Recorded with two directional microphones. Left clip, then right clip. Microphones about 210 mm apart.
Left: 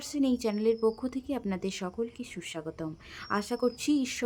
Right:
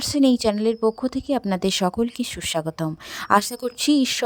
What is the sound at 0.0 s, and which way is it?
A woman's voice, 40° right (ahead or behind).